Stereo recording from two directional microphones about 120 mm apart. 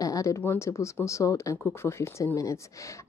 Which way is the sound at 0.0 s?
30° left (ahead or behind).